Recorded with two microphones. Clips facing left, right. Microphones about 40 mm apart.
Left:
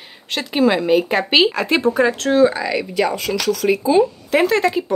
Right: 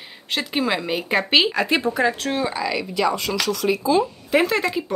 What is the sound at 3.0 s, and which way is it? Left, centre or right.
Speech, left.